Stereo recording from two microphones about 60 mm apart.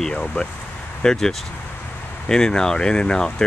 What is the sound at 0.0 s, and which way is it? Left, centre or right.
Speech, centre.